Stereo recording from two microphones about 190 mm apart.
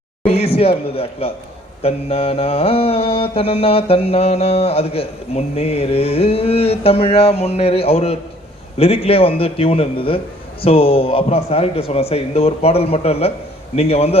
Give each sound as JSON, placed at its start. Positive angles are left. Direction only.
{"t": 0.3, "sound": "mantra", "side_deg": 30}
{"t": 8.8, "sound": "a man's voice", "side_deg": 30}
{"t": 10.6, "sound": "mantra", "side_deg": 30}